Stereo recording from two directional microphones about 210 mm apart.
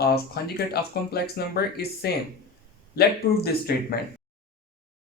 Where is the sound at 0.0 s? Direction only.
50° left (ahead or behind).